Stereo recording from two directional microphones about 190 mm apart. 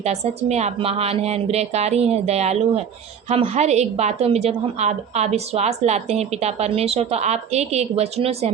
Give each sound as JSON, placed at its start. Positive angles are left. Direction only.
{"t": 0.0, "sound": "a woman's voice", "side_deg": -35}